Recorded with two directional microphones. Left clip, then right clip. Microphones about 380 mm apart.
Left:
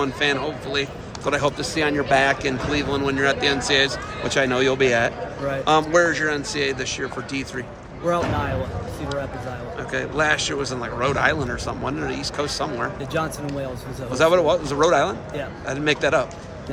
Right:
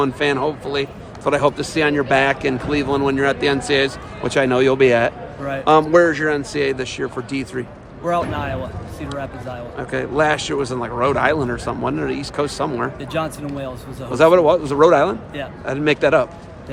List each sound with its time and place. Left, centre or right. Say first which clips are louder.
0.0 s a man's voice: right 4 dB; centre
9.7 s a man's voice: right 4 dB; centre
13.1 s speech: right 2 dB; centre
14.1 s a man's voice: right 5 dB; centre